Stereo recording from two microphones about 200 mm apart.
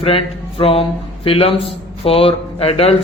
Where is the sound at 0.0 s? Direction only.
30° left (ahead or behind).